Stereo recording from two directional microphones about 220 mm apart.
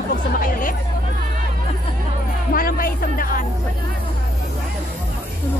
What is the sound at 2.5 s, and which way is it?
Music, 40° left (ahead or behind).